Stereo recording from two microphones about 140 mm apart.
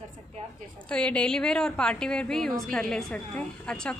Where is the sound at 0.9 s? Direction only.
10° left (ahead or behind).